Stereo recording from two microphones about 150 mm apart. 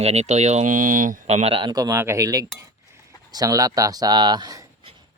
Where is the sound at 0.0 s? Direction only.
45° right (ahead or behind).